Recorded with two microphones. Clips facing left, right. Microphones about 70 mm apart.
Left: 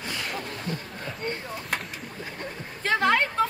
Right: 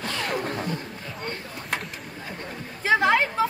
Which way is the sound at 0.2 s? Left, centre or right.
Right.